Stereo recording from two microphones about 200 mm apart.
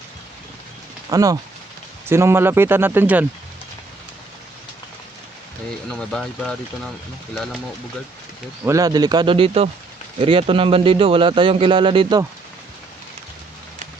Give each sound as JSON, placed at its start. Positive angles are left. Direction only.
{"t": 1.1, "sound": "speech", "side_deg": -15}
{"t": 5.9, "sound": "speech", "side_deg": 5}
{"t": 8.6, "sound": "speech", "side_deg": -15}